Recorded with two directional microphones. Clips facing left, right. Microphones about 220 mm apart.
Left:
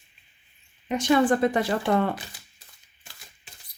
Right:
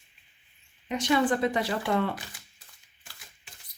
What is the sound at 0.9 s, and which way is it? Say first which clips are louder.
Speech: left 4 dB; 50° left (ahead or behind).